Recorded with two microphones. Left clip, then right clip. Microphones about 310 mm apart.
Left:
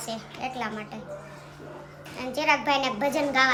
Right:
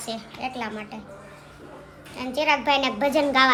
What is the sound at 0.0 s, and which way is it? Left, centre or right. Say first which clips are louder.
Speech: right 2 dB; centre.